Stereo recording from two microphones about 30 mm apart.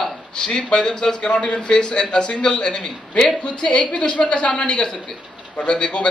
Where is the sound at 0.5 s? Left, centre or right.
Left.